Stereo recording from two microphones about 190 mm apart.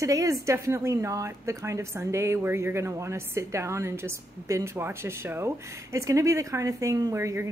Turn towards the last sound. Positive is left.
turn(degrees=-15)  # may be behind; listen again after turning